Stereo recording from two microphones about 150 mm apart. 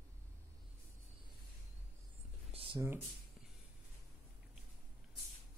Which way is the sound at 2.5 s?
35° right (ahead or behind).